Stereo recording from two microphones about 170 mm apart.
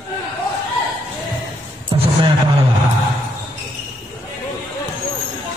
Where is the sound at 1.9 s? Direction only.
30° right (ahead or behind).